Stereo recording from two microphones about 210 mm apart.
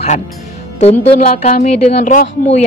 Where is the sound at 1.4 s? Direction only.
35° left (ahead or behind).